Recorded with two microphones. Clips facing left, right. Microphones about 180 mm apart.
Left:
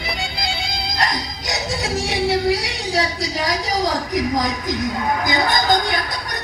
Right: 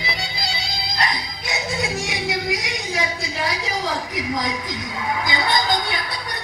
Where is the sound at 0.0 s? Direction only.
50° left (ahead or behind).